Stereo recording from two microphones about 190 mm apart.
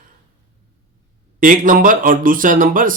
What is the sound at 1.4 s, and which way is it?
Speech, 45° right (ahead or behind).